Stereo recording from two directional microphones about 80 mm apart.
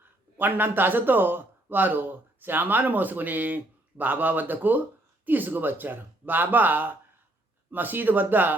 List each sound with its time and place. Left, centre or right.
0.3 s speech: right